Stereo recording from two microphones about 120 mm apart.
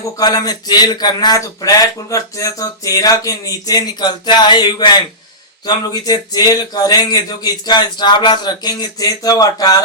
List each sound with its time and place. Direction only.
0.2 s a man's voice: 30° left (ahead or behind)